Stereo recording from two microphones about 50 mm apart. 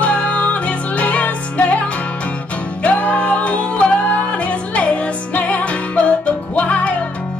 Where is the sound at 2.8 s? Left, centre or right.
Left.